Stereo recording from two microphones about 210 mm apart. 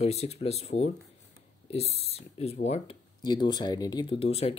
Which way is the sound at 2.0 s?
30° left (ahead or behind).